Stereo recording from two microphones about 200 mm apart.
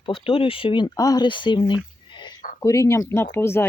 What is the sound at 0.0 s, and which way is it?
Speech, 25° left (ahead or behind).